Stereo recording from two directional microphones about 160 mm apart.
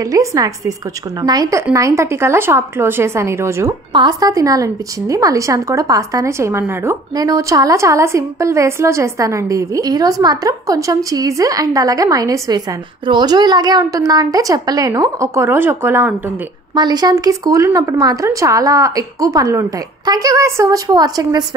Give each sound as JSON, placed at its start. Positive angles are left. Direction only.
{"t": 0.0, "sound": "a woman's voice", "side_deg": -20}
{"t": 16.7, "sound": "a woman's voice", "side_deg": -25}